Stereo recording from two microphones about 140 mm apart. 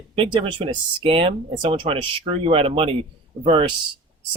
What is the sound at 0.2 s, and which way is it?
Speech, 40° right (ahead or behind).